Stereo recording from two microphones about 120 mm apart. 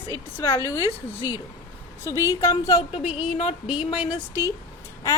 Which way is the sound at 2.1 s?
30° left (ahead or behind).